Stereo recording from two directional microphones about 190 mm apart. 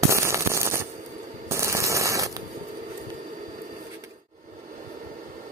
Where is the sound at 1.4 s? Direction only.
15° right (ahead or behind).